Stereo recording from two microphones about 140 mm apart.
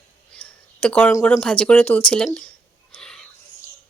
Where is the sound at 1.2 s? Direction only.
5° left (ahead or behind).